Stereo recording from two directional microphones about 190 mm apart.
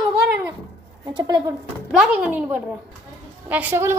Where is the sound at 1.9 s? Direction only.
10° right (ahead or behind).